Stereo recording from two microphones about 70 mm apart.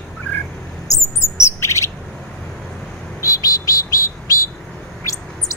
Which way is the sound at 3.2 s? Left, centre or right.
Left.